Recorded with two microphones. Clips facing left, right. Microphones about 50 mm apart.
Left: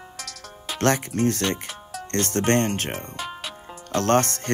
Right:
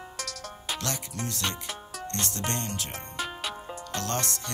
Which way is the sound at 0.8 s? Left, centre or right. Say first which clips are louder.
Left 17 dB; left.